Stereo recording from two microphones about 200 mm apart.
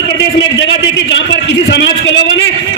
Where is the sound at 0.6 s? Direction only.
65° left (ahead or behind).